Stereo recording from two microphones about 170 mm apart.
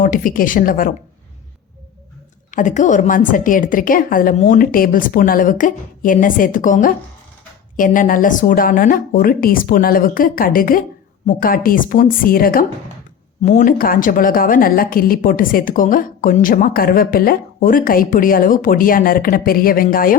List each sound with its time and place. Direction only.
0.0 s a woman's voice: 55° left (ahead or behind)
2.5 s a woman's voice: 50° left (ahead or behind)
13.4 s a woman's voice: 45° left (ahead or behind)